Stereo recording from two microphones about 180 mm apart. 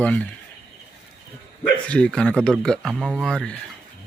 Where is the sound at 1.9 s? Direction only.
5° left (ahead or behind).